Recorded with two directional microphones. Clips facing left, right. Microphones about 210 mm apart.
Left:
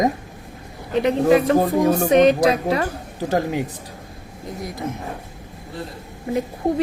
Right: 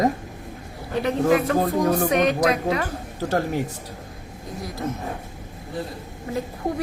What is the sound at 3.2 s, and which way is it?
Speech, 15° left (ahead or behind).